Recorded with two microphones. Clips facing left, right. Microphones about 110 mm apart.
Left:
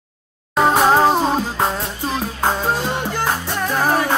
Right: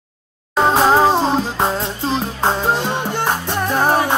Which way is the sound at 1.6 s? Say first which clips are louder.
Right 2 dB; 25° right (ahead or behind).